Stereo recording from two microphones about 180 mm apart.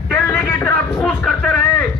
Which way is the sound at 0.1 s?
10° left (ahead or behind).